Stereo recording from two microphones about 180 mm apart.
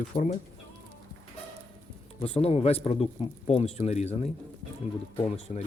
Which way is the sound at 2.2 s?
35° left (ahead or behind).